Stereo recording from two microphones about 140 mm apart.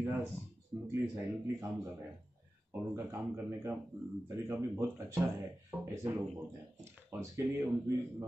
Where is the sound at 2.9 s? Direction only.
20° right (ahead or behind).